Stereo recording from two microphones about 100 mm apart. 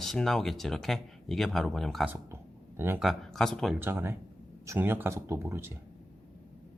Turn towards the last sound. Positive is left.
turn(degrees=-25)  # may be behind; listen again after turning